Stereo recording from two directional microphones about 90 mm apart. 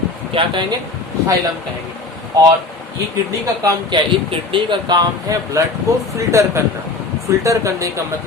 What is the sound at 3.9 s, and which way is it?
Speech, 55° right (ahead or behind).